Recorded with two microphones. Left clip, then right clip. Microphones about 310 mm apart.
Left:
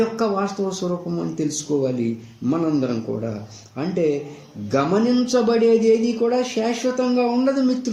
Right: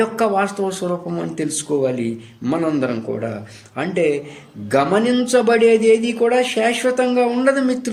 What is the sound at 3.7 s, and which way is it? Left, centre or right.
Speech, right.